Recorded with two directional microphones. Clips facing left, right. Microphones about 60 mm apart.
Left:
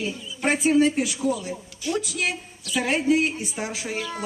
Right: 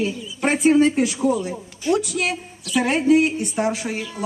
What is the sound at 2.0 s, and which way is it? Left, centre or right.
A man's voice, centre.